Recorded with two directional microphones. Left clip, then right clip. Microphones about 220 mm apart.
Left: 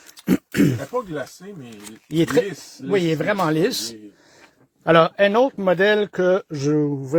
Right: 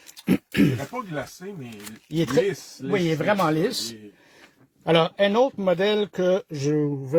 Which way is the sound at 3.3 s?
30° left (ahead or behind).